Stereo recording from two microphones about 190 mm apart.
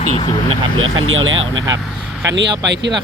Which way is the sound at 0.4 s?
90° right.